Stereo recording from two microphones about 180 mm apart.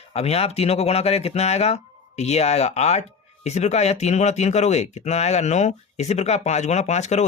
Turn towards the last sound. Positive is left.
turn(degrees=40)  # may be behind; listen again after turning